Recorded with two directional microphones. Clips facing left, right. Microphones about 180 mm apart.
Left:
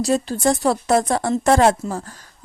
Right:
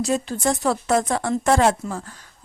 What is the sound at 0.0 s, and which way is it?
Speech, 35° left (ahead or behind).